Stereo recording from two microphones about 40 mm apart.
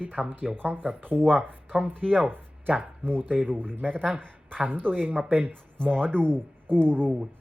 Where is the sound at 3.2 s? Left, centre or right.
Right.